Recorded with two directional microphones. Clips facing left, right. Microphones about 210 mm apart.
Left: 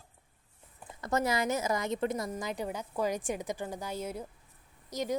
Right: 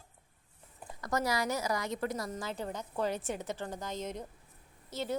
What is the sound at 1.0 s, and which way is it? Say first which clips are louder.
A woman's voice: left 2 dB; 25° left (ahead or behind).